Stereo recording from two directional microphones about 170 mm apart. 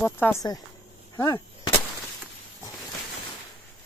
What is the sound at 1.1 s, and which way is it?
Gunshot, 15° left (ahead or behind).